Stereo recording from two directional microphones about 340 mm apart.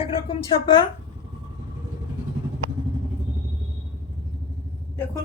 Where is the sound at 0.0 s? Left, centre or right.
Centre.